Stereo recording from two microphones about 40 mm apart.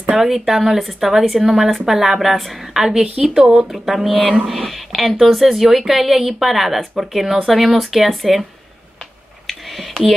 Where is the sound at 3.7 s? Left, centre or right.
Centre.